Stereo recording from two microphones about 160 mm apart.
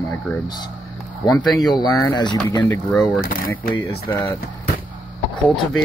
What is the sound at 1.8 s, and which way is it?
Speech, 25° left (ahead or behind).